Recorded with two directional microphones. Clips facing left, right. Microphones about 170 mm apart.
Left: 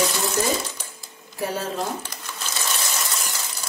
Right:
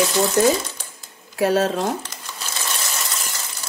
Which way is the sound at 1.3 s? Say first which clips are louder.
Right 9 dB; 70° right (ahead or behind).